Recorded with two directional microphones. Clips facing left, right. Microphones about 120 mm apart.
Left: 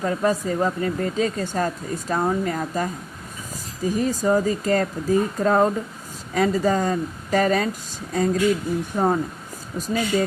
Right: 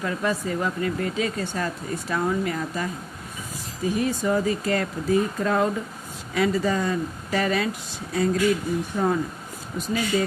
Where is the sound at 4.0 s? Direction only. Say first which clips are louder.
Left 3 dB; 40° left (ahead or behind).